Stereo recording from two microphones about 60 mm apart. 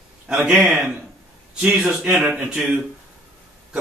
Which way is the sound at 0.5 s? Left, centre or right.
Right.